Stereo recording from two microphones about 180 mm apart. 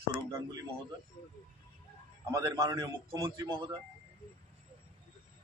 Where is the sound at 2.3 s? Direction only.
15° right (ahead or behind).